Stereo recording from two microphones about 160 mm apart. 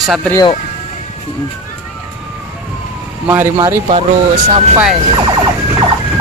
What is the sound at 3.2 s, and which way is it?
Speech, 15° right (ahead or behind).